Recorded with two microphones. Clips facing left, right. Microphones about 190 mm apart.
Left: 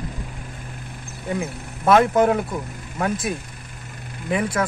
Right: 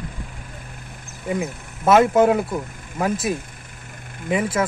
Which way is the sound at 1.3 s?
5° right (ahead or behind).